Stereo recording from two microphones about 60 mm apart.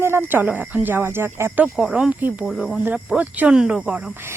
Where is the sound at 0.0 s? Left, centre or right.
Right.